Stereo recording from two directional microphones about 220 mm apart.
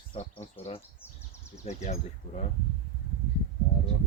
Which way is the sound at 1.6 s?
30° left (ahead or behind).